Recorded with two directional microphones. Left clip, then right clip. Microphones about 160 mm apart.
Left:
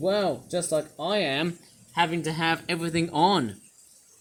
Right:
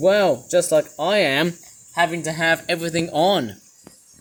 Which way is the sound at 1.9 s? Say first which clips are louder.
Right 5 dB; 15° left (ahead or behind).